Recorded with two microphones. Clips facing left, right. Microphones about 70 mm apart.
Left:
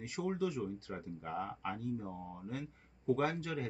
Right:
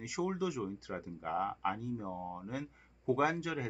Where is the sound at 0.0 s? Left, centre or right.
Centre.